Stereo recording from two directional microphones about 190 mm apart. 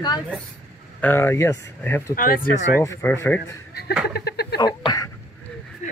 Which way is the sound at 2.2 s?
50° left (ahead or behind).